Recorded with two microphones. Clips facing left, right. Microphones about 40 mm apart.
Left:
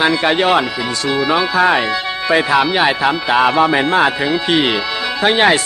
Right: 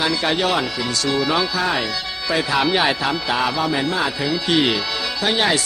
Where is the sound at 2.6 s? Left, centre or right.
Centre.